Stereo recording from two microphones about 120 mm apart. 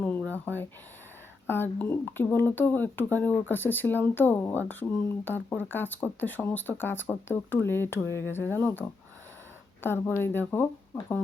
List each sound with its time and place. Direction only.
0.3 s speech: 15° left (ahead or behind)